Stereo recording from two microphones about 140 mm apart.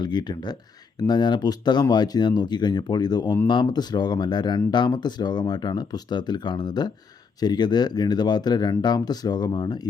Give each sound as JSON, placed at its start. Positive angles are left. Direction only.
{"t": 0.0, "sound": "speech", "side_deg": 30}